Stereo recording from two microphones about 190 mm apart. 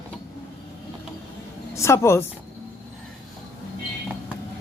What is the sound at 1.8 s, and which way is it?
Speech, 15° left (ahead or behind).